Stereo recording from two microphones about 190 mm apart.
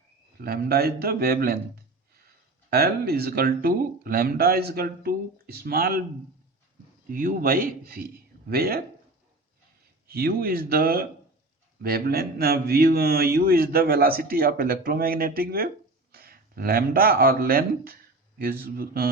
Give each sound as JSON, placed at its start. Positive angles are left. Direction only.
{"t": 0.4, "sound": "a man's voice", "side_deg": -55}
{"t": 7.1, "sound": "a man's voice", "side_deg": -45}
{"t": 10.1, "sound": "a man's voice", "side_deg": -50}